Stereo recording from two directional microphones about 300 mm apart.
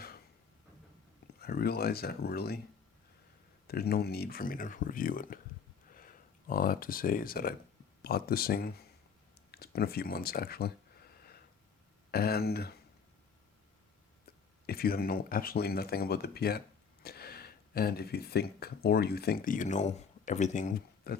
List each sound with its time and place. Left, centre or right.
1.4 s speech: left
3.7 s speech: left
12.1 s speech: left
14.3 s speech: left